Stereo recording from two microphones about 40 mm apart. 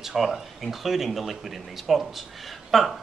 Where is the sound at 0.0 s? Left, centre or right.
Centre.